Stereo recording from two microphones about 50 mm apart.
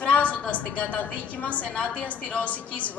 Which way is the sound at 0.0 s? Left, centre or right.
Left.